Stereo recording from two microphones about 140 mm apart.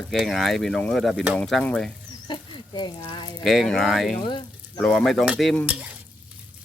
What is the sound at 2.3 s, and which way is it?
Speech, 35° left (ahead or behind).